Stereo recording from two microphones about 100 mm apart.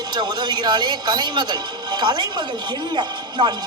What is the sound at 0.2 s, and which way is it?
Speech, 45° right (ahead or behind).